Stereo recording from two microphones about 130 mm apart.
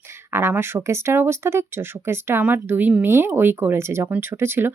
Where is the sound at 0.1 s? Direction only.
20° right (ahead or behind).